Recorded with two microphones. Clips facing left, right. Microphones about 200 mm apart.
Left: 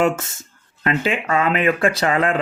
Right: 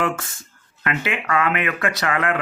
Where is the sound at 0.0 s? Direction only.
25° left (ahead or behind).